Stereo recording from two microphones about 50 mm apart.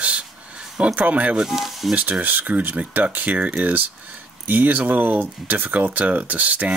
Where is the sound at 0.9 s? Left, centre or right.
Right.